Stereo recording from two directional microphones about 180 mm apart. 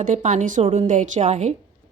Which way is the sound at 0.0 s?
45° right (ahead or behind).